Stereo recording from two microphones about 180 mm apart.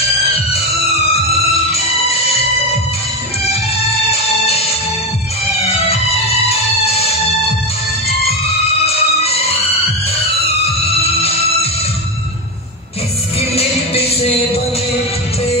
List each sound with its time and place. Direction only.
4.1 s music: 35° left (ahead or behind)
5.9 s music: 35° left (ahead or behind)
8.8 s music: 35° left (ahead or behind)
11.1 s music: 35° left (ahead or behind)
13.4 s music: 35° left (ahead or behind)